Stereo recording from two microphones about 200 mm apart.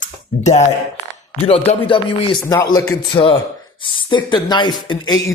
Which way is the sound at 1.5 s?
30° left (ahead or behind).